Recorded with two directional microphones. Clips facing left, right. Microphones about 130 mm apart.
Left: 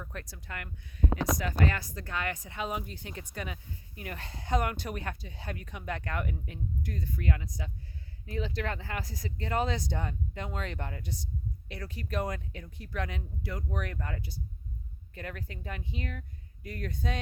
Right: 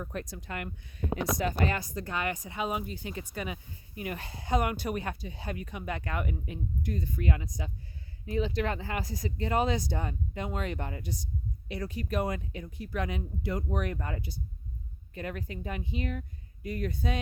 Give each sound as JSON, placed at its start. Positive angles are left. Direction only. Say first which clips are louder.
{"t": 0.0, "sound": "speech", "louder": "right 6 dB", "side_deg": -20}